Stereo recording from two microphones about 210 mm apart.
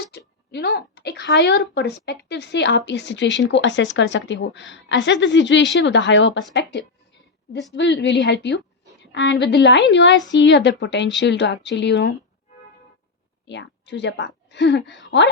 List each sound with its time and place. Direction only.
0.1 s a sound: 50° left (ahead or behind)
0.5 s speech: 50° left (ahead or behind)
13.4 s a woman's voice: 55° left (ahead or behind)